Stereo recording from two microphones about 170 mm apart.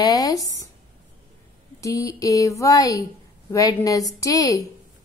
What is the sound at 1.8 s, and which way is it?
Speech, 20° left (ahead or behind).